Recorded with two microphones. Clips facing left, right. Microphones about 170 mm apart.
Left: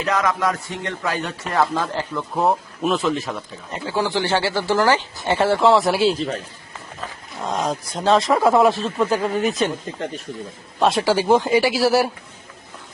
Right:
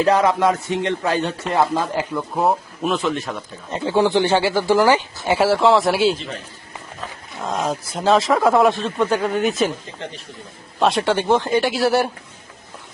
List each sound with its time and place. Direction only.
0.0 s speech: 30° right (ahead or behind); by 3.4 s centre (ahead or behind)
3.7 s speech: 25° right (ahead or behind); by 6.1 s centre (ahead or behind)
6.1 s a man's voice: 40° left (ahead or behind)
7.0 s speech: centre (ahead or behind)
10.8 s speech: centre (ahead or behind)